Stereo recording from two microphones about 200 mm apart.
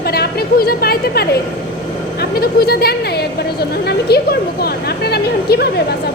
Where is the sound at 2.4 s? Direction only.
50° left (ahead or behind).